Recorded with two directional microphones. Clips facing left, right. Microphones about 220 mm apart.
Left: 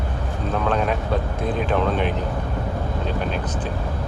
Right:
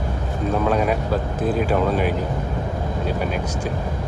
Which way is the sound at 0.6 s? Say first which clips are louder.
Right 1 dB; 5° right (ahead or behind).